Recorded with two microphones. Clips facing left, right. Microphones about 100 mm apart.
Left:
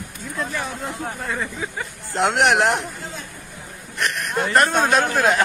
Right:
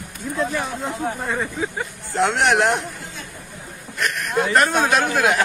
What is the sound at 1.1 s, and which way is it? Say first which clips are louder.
Speech: right 3 dB; 20° right (ahead or behind).